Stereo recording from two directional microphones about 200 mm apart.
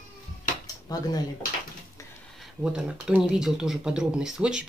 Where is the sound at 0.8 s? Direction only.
20° left (ahead or behind).